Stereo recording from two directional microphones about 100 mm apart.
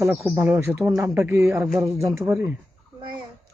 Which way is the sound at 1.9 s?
30° right (ahead or behind).